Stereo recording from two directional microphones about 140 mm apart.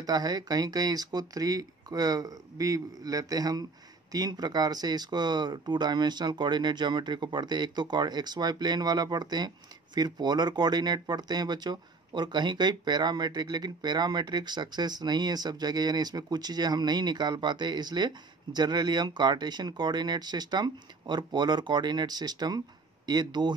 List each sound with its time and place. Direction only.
0.0 s speech: 30° right (ahead or behind)